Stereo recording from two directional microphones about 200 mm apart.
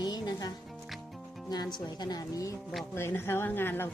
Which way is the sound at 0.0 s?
20° left (ahead or behind).